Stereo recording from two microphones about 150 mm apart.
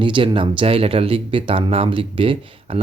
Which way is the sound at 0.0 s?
35° right (ahead or behind).